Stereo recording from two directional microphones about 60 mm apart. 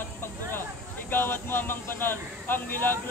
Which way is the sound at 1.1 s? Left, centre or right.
Left.